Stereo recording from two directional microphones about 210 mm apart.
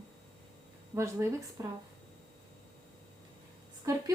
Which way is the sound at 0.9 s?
15° right (ahead or behind).